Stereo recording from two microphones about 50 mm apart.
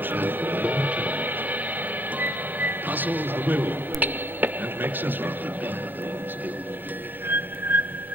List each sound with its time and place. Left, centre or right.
0.0 s music: right
7.2 s whistling: right